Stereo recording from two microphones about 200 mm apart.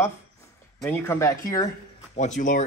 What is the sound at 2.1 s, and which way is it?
Speech, 35° left (ahead or behind).